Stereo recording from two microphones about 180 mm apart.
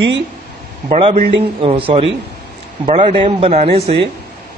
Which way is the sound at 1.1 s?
55° right (ahead or behind).